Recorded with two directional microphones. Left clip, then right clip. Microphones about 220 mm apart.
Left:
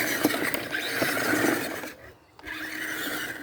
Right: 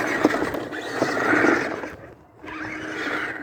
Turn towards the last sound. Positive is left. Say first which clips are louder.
# right 5 dB
turn(degrees=-15)  # may be behind; listen again after turning